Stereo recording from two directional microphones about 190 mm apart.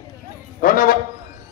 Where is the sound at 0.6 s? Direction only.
50° left (ahead or behind).